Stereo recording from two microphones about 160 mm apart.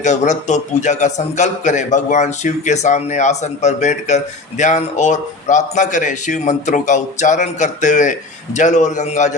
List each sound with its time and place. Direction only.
0.0 s a man's voice: 50° left (ahead or behind)